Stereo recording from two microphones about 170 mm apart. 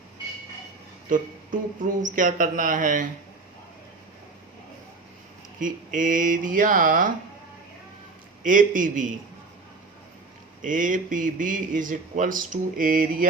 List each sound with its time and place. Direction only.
1.1 s speech: 50° right (ahead or behind)
5.5 s speech: 50° right (ahead or behind)
8.4 s speech: 50° right (ahead or behind)
10.6 s speech: 50° right (ahead or behind)